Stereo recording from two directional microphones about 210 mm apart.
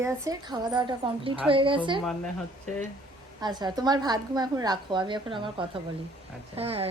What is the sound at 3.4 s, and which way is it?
A woman's voice, 20° right (ahead or behind).